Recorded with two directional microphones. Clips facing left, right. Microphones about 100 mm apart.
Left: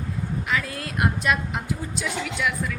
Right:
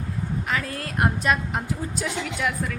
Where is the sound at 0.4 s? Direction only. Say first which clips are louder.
Left 2 dB; 40° right (ahead or behind).